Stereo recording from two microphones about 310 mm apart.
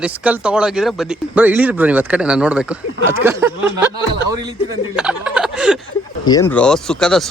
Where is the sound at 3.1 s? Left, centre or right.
Centre.